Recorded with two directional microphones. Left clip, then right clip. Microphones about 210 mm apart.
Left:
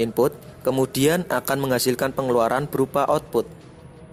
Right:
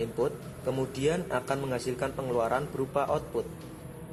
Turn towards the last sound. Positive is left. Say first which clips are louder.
# left 8 dB
turn(degrees=55)  # may be behind; listen again after turning